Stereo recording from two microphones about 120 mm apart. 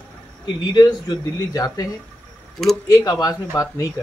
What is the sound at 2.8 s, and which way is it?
Speech, 30° left (ahead or behind).